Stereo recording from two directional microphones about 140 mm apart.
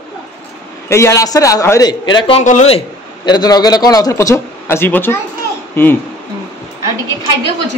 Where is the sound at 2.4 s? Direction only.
65° left (ahead or behind).